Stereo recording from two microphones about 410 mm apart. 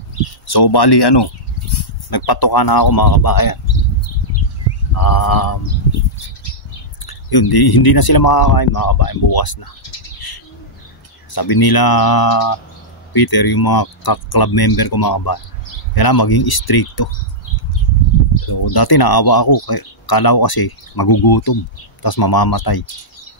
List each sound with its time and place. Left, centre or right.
0.5 s speech: left
4.9 s speech: left
7.1 s speech: left
18.3 s speech: left